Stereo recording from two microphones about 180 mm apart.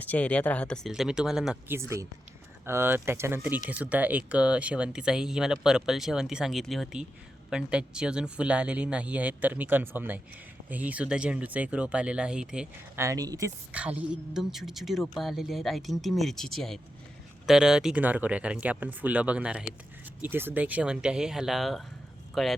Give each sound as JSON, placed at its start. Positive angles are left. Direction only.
{"t": 0.0, "sound": "speech", "side_deg": 10}
{"t": 1.7, "sound": "speech", "side_deg": -15}
{"t": 13.1, "sound": "speech", "side_deg": -20}
{"t": 13.7, "sound": "speech", "side_deg": -5}